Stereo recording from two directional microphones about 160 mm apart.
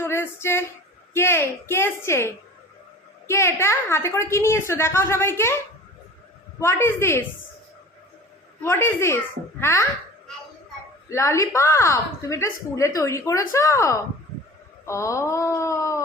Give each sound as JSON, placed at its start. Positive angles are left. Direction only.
{"t": 0.0, "sound": "a sound", "side_deg": 15}
{"t": 1.1, "sound": "a woman's voice", "side_deg": 15}
{"t": 6.6, "sound": "a woman's voice", "side_deg": 15}
{"t": 8.6, "sound": "a woman's voice", "side_deg": 15}
{"t": 11.1, "sound": "a woman's voice", "side_deg": 20}